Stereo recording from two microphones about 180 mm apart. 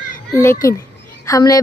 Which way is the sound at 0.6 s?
15° left (ahead or behind).